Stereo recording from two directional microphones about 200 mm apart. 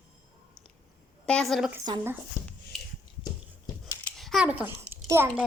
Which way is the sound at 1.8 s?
15° right (ahead or behind).